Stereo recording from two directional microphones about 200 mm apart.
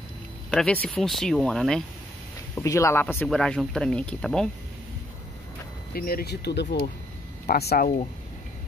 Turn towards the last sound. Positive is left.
turn(degrees=50)  # may be behind; listen again after turning